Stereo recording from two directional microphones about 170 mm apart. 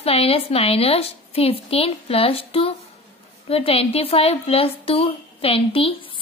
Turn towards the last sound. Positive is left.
turn(degrees=35)  # may be behind; listen again after turning